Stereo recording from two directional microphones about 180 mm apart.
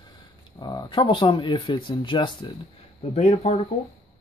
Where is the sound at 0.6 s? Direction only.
25° left (ahead or behind).